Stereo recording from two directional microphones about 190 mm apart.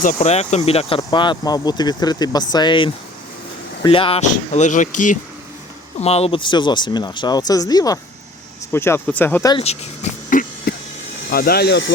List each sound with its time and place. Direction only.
0.0 s speech: 40° left (ahead or behind); by 9.5 s 10° left (ahead or behind)
9.5 s a sound: 30° left (ahead or behind)
11.3 s speech: 55° left (ahead or behind)